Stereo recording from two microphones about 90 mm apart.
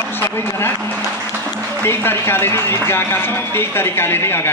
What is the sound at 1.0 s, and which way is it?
Music, 25° right (ahead or behind).